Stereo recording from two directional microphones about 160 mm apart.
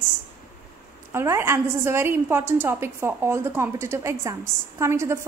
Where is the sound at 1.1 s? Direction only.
15° right (ahead or behind).